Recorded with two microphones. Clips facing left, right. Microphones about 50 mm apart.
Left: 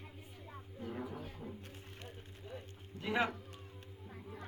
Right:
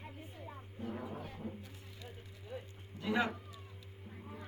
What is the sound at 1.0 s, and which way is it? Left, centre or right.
Music, right.